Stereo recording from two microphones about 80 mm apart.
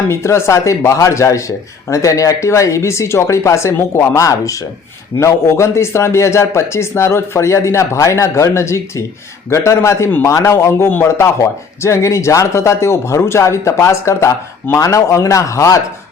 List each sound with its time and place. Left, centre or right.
0.1 s speech: left